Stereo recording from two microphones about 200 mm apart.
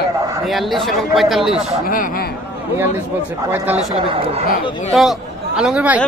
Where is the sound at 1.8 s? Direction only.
45° left (ahead or behind).